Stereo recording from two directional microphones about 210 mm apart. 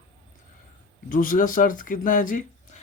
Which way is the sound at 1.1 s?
40° left (ahead or behind).